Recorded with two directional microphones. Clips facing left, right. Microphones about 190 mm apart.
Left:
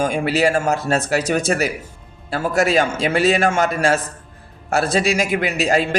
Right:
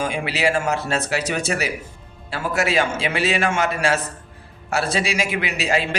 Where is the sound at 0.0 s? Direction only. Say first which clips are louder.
Left 5 dB; 45° left (ahead or behind).